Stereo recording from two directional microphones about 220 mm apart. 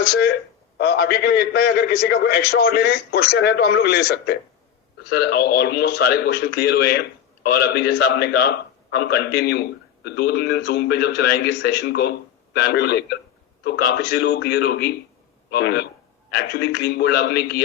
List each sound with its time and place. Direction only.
0.0 s a man's voice: 50° left (ahead or behind)